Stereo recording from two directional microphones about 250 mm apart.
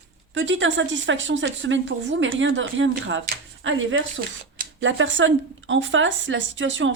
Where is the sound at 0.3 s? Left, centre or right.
Right.